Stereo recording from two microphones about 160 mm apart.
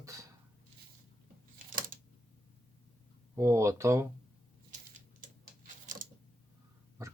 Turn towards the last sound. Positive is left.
turn(degrees=-20)  # may be behind; listen again after turning